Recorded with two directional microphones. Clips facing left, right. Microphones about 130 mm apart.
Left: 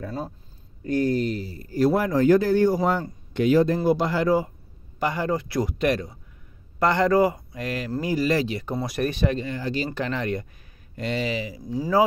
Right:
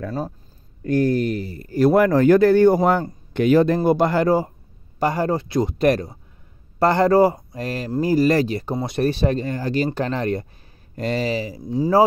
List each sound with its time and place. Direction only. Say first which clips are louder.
0.8 s a man's voice: right 4 dB; 55° right (ahead or behind); by 5.8 s 25° right (ahead or behind)
5.8 s speech: right 5 dB; 40° right (ahead or behind)
8.7 s speech: right 5 dB; 25° right (ahead or behind); by 9.8 s 45° right (ahead or behind)
9.8 s speech: right 4 dB; 35° right (ahead or behind)